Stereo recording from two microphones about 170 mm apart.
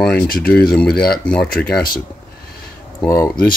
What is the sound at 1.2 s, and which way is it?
Speech, 5° left (ahead or behind).